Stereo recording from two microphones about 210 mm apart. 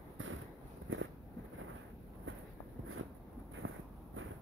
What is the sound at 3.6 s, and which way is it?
Walk, 70° right (ahead or behind).